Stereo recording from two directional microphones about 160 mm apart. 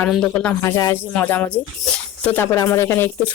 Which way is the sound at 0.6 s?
20° left (ahead or behind).